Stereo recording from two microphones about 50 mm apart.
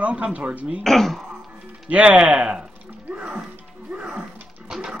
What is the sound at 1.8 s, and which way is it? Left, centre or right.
Speech, right.